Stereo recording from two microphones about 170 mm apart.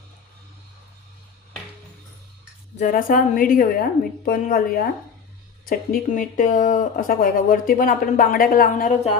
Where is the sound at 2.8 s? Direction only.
55° left (ahead or behind).